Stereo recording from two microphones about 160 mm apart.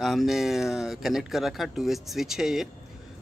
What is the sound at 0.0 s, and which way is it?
Speech, centre (ahead or behind).